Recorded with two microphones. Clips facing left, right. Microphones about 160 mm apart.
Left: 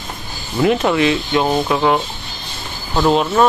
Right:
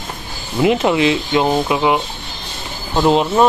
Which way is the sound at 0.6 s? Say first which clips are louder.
Right 1 dB; 20° right (ahead or behind).